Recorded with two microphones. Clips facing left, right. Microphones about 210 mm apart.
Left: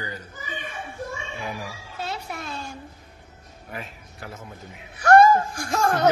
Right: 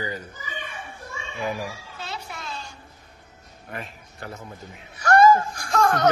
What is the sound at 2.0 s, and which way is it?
Music, 50° left (ahead or behind).